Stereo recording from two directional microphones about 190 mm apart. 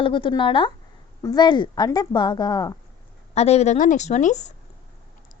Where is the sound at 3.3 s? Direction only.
35° left (ahead or behind).